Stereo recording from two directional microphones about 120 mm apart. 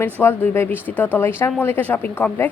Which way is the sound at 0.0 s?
15° left (ahead or behind).